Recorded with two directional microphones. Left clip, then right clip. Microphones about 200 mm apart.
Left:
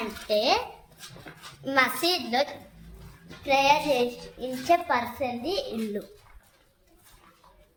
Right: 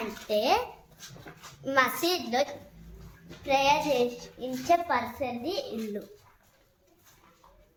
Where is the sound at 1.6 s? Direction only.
5° left (ahead or behind).